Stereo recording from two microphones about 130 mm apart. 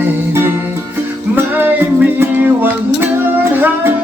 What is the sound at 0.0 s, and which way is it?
Music, 15° right (ahead or behind).